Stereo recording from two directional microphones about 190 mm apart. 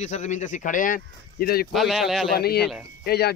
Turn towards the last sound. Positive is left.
turn(degrees=55)  # may be behind; listen again after turning